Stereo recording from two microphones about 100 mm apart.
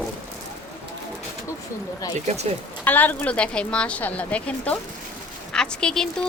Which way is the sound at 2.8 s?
20° left (ahead or behind).